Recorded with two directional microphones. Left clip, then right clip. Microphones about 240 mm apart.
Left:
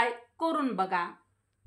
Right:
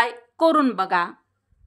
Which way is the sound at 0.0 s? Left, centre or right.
Right.